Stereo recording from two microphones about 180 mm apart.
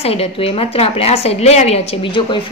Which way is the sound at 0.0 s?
35° left (ahead or behind).